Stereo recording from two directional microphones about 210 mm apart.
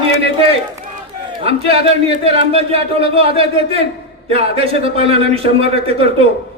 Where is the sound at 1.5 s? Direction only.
30° right (ahead or behind).